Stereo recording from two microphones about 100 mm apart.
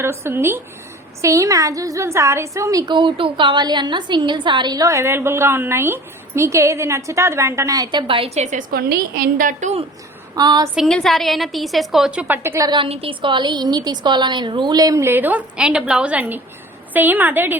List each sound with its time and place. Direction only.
0.0 s a woman's voice: 25° right (ahead or behind)
2.8 s a woman's voice: 55° right (ahead or behind); by 7.9 s 35° right (ahead or behind)
7.9 s a woman's voice: 60° right (ahead or behind)
10.3 s a woman's voice: 40° right (ahead or behind)
10.8 s a woman's voice: 5° left (ahead or behind)
12.3 s speech: 25° right (ahead or behind)
12.8 s a woman's voice: 65° right (ahead or behind); by 15.0 s 40° right (ahead or behind)
15.0 s a woman's voice: 20° right (ahead or behind)